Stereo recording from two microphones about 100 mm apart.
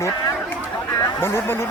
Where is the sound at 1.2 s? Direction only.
25° left (ahead or behind).